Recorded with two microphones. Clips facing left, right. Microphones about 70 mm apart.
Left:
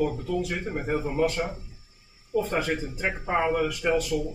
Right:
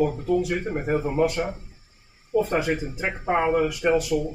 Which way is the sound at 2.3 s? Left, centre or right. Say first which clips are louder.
Right 4 dB; right.